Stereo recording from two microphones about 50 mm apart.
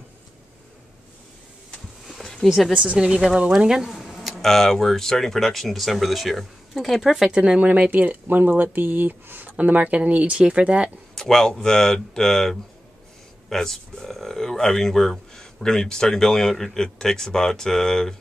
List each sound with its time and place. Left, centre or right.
2.0 s a sound: centre
2.4 s speech: centre
3.0 s speech: centre
7.2 s speech: right
11.1 s speech: centre